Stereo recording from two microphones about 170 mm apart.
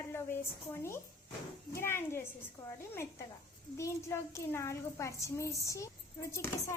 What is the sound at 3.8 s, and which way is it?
Speech, 15° left (ahead or behind).